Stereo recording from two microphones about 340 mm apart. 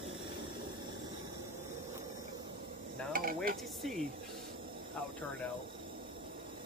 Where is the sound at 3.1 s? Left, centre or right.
Right.